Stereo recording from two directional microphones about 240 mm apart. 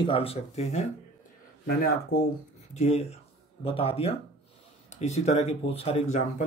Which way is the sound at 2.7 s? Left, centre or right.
Left.